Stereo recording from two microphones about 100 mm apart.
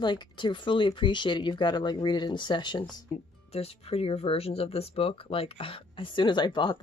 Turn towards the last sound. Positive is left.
turn(degrees=50)  # may be behind; listen again after turning